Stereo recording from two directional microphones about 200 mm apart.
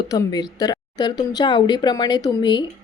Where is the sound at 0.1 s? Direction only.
20° left (ahead or behind).